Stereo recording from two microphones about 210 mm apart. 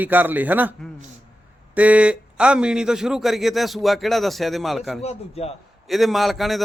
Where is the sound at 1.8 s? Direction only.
5° right (ahead or behind).